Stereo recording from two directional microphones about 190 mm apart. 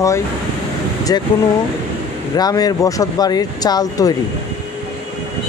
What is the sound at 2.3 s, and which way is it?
Speech, 20° left (ahead or behind).